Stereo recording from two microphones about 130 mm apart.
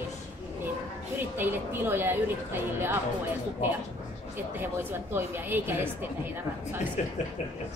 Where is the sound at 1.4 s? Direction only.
15° right (ahead or behind).